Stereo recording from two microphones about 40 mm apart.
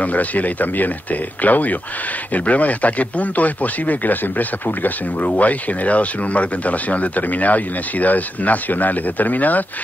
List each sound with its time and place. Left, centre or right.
0.0 s speech: left